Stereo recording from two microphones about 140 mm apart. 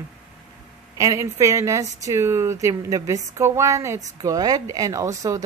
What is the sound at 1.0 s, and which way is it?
Speech, 20° right (ahead or behind).